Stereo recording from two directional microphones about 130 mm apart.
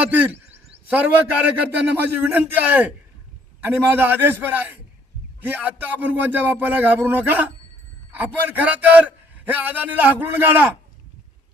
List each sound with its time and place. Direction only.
0.0 s a man's voice: 15° right (ahead or behind)